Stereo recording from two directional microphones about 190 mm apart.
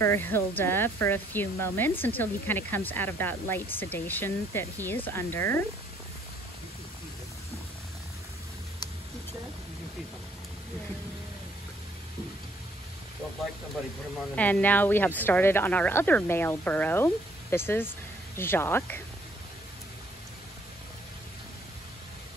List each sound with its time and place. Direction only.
0.0 s speech: 10° left (ahead or behind)
14.3 s speech: 10° left (ahead or behind)